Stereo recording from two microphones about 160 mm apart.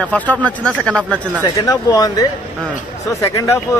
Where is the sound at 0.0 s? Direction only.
10° left (ahead or behind).